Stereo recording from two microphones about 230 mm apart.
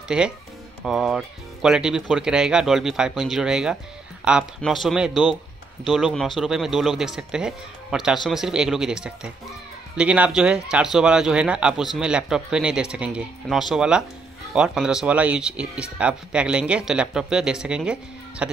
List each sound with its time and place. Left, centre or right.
0.1 s speech: centre